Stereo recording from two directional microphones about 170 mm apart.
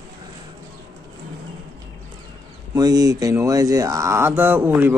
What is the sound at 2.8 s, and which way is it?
Speech, 20° right (ahead or behind).